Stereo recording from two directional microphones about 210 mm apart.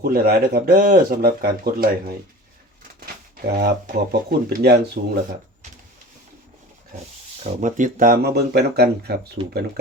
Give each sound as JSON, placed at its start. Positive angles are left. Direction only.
{"t": 0.1, "sound": "speech", "side_deg": -45}
{"t": 3.3, "sound": "speech", "side_deg": -45}
{"t": 7.6, "sound": "speech", "side_deg": -40}